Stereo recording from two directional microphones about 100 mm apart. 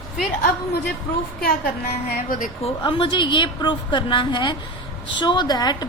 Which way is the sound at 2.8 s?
55° left (ahead or behind).